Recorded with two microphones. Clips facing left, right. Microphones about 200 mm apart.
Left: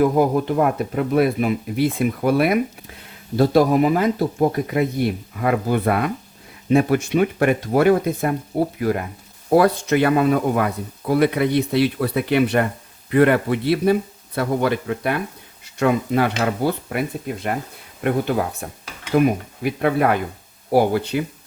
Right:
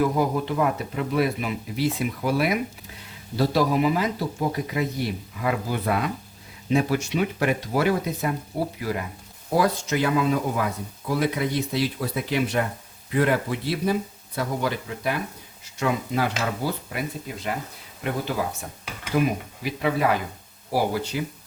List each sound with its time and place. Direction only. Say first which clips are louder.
0.0 s speech: left 6 dB; 50° left (ahead or behind)